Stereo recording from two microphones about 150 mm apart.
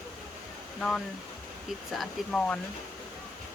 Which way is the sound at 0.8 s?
5° left (ahead or behind).